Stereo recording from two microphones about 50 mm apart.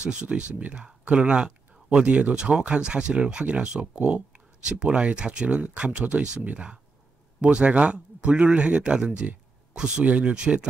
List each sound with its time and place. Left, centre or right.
0.0 s speech: right